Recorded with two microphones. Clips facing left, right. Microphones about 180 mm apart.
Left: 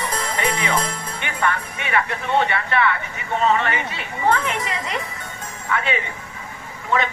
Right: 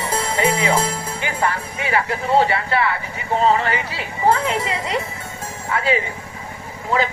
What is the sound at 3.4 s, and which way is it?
Speech, 30° right (ahead or behind).